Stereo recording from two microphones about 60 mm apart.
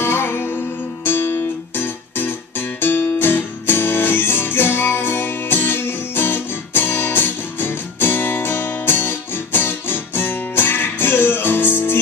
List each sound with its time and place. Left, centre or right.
0.0 s music: left